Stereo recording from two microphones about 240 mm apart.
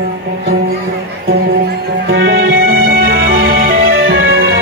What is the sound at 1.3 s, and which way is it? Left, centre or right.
Music, right.